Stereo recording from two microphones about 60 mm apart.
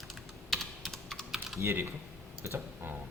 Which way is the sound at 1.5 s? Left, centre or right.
Right.